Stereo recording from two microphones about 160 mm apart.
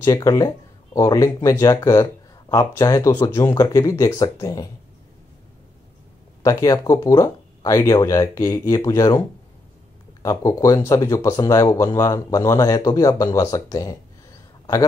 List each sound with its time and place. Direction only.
0.0 s speech: 20° left (ahead or behind)
6.4 s speech: 20° left (ahead or behind)
10.2 s speech: 20° left (ahead or behind)